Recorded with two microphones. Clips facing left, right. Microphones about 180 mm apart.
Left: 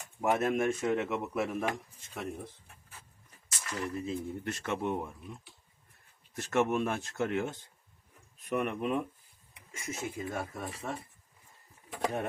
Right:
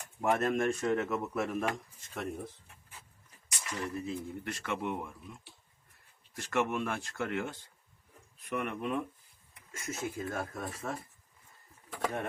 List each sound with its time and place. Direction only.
0.0 s speech: 5° left (ahead or behind)
4.0 s speech: 25° left (ahead or behind)
9.7 s speech: 5° left (ahead or behind)
11.9 s a sound: 20° left (ahead or behind)